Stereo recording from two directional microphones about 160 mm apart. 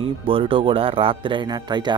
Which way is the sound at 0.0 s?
35° right (ahead or behind).